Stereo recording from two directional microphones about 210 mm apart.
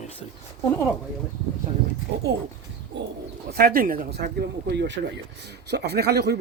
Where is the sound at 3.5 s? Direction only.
45° right (ahead or behind).